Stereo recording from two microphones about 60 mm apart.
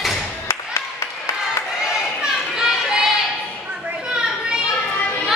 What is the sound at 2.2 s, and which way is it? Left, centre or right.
Children playing, centre.